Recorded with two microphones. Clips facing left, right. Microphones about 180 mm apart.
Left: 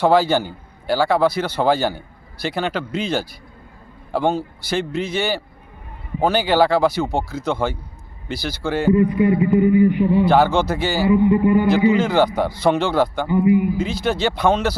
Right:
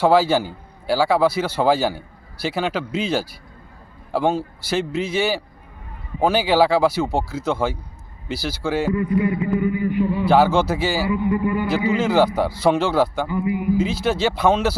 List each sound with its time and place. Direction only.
0.0 s a man's voice: 5° right (ahead or behind)
8.9 s a man's voice: 25° left (ahead or behind)
10.2 s a man's voice: 5° right (ahead or behind)
11.1 s a man's voice: 25° left (ahead or behind)
11.9 s a man's voice: 5° right (ahead or behind)
13.2 s a man's voice: 20° left (ahead or behind)
13.7 s a man's voice: 5° right (ahead or behind)